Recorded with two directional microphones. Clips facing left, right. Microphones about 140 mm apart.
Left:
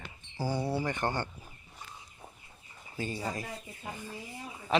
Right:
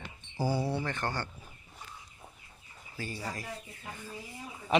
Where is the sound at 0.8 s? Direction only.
15° left (ahead or behind).